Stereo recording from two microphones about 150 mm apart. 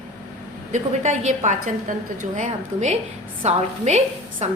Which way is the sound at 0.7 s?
55° right (ahead or behind).